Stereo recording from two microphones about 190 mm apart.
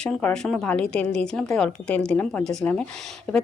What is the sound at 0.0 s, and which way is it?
A woman's voice, 5° left (ahead or behind).